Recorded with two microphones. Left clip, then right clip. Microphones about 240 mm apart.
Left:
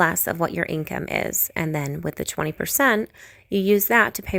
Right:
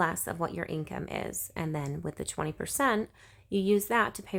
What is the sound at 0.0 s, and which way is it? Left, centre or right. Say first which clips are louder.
A woman's voice: left 9 dB; left.